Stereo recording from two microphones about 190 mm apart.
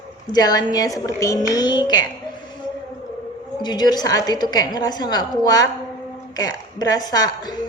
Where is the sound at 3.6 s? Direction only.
20° left (ahead or behind).